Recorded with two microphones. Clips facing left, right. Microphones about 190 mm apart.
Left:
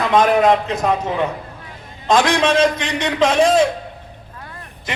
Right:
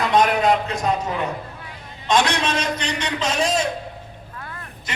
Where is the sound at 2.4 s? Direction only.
90° left.